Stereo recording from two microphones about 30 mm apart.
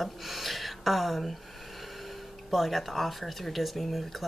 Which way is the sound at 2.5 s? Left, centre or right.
Centre.